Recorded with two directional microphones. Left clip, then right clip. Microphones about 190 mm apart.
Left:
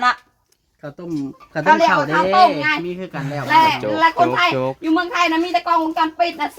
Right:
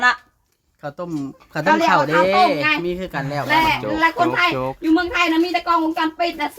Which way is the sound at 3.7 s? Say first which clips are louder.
Left 2 dB; 5° left (ahead or behind).